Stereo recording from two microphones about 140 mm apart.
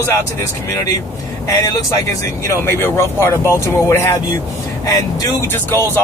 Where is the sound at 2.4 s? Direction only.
20° left (ahead or behind).